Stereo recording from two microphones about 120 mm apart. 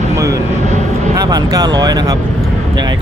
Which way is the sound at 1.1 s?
30° right (ahead or behind).